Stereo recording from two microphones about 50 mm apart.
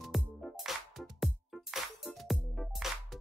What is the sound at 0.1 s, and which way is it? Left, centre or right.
Music, centre.